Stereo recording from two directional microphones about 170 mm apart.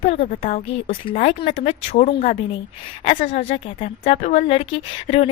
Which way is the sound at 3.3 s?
40° left (ahead or behind).